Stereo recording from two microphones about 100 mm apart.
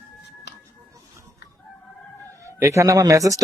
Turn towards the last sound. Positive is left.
turn(degrees=-35)  # may be behind; listen again after turning